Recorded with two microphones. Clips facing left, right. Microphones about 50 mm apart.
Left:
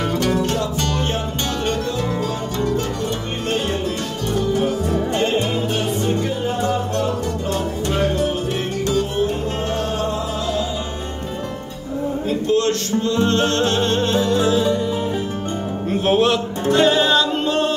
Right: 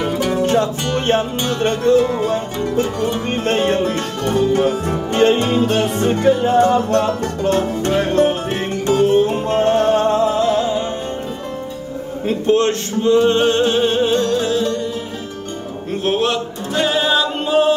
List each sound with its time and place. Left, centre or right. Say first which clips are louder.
0.0 s music: right 2 dB; centre
1.0 s music: right 6 dB; right
2.2 s music: right 2 dB; right
3.4 s music: right 5 dB; right
8.8 s music: right 7 dB; right
12.3 s music: right 4 dB; right; by 14.8 s centre
15.9 s music: left 1 dB; centre